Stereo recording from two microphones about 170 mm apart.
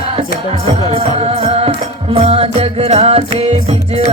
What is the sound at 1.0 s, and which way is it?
Music, 35° right (ahead or behind).